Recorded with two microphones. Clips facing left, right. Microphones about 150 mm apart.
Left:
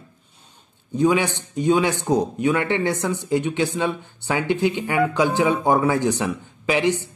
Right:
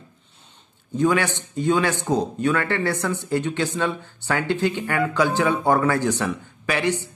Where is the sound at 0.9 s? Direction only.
15° left (ahead or behind).